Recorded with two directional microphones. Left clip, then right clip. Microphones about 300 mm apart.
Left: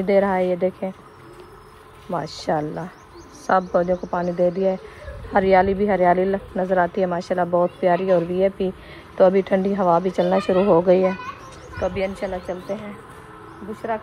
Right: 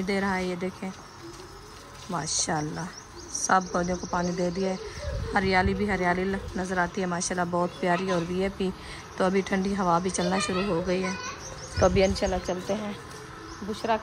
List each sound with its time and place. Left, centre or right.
0.0 s speech: centre
2.0 s speech: centre
11.8 s speech: right